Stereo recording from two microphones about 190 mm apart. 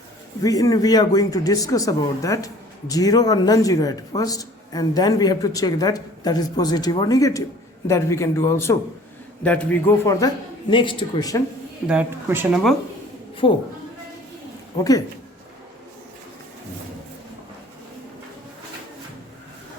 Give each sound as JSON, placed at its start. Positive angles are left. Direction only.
{"t": 0.4, "sound": "a man's voice", "side_deg": 20}
{"t": 11.9, "sound": "speech", "side_deg": -10}
{"t": 13.4, "sound": "speech", "side_deg": 25}